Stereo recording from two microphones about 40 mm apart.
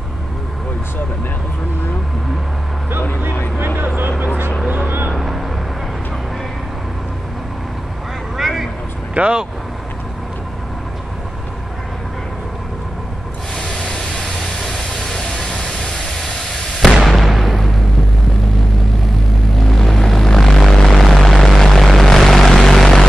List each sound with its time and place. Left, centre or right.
3.5 s a sound: right
4.8 s vehicle: right
8.4 s vehicle: centre
9.1 s speech: right
13.9 s vehicle: centre
17.0 s a sound: centre
19.6 s vehicle: centre